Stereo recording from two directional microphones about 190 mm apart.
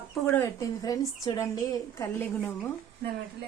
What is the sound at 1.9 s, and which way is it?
Speech, 10° left (ahead or behind).